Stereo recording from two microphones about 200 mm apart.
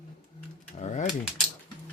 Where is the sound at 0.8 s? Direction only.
35° left (ahead or behind).